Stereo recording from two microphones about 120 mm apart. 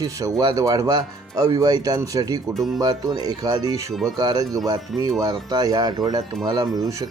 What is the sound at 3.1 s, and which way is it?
Speech, 30° right (ahead or behind).